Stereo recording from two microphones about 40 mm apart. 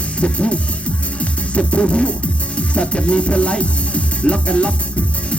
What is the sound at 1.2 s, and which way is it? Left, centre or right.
Music, left.